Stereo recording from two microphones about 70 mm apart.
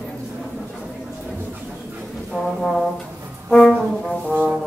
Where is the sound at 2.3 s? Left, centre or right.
Centre.